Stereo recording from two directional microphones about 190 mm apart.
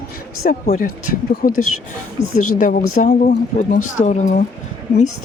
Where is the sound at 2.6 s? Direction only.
45° left (ahead or behind).